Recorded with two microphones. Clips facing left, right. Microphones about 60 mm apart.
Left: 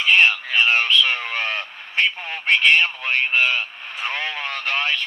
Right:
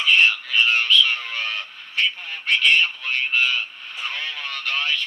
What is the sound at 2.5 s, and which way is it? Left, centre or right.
Speech, left.